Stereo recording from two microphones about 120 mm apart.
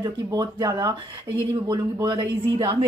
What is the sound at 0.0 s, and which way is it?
Speech, 35° right (ahead or behind).